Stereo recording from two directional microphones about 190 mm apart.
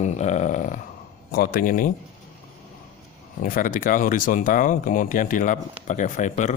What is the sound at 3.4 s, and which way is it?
Speech, 45° left (ahead or behind).